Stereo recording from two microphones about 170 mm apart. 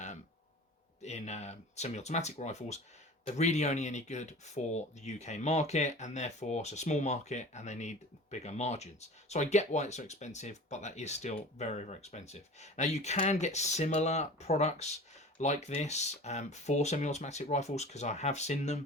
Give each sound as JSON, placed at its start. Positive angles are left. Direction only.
{"t": 1.0, "sound": "speech", "side_deg": 40}